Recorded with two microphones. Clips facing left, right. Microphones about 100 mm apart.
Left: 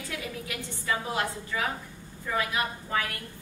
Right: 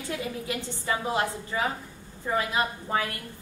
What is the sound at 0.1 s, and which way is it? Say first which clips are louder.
A woman's voice: right 6 dB; 25° right (ahead or behind).